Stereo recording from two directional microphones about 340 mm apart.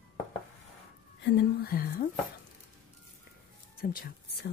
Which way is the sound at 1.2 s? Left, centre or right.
Left.